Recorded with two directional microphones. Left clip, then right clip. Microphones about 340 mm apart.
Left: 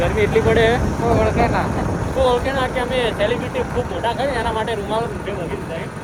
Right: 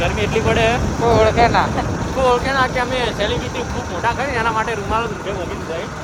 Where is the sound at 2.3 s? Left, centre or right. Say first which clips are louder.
Right 6 dB; centre.